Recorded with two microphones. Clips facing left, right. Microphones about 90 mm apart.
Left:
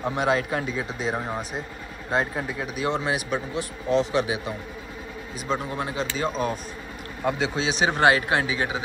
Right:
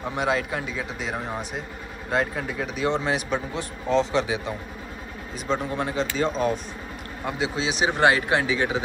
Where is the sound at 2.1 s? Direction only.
25° left (ahead or behind).